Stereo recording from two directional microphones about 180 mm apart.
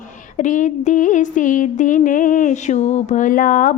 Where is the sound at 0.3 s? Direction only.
45° left (ahead or behind).